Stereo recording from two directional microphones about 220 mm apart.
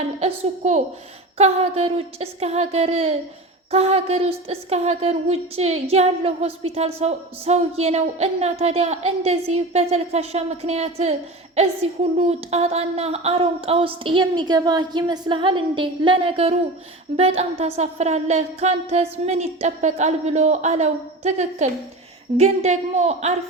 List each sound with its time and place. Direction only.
0.2 s speech: 30° right (ahead or behind)
12.1 s speech: 25° right (ahead or behind)
17.2 s music: 30° right (ahead or behind)